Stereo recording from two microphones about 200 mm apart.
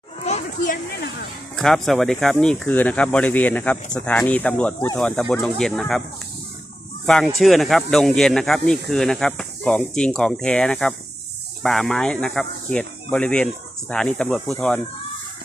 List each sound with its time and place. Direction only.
0.3 s speech: 40° left (ahead or behind)
1.5 s speech: centre (ahead or behind)
7.0 s speech: 5° left (ahead or behind)